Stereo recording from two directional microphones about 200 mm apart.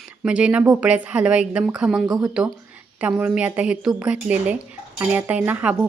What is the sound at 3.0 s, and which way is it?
Speech, 10° right (ahead or behind).